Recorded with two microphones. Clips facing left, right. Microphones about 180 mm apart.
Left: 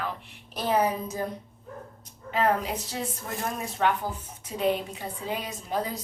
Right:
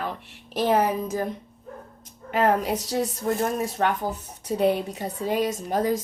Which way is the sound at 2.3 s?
50° right (ahead or behind).